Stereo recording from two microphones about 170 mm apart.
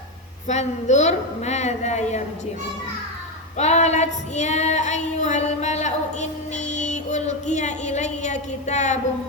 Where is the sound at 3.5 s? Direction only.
40° left (ahead or behind).